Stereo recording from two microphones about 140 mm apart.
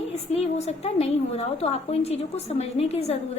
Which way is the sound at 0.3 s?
45° left (ahead or behind).